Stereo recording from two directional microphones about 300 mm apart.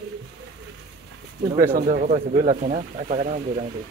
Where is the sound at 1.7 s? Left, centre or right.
Right.